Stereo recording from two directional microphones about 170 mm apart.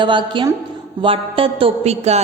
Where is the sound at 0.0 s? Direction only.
30° right (ahead or behind).